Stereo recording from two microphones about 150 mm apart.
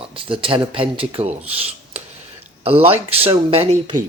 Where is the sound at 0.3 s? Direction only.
35° right (ahead or behind).